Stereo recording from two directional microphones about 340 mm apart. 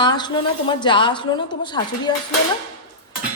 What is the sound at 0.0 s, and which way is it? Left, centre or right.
A woman's voice, centre.